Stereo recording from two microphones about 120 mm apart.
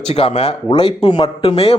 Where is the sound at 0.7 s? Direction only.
45° left (ahead or behind).